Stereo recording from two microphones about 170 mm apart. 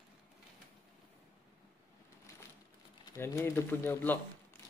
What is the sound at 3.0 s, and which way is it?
Speech, 20° left (ahead or behind).